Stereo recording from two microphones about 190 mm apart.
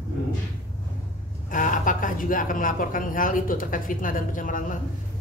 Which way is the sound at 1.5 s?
45° left (ahead or behind).